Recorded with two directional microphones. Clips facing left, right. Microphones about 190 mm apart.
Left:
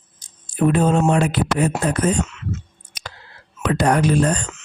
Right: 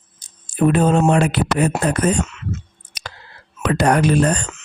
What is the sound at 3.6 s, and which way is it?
Speech, 70° right (ahead or behind).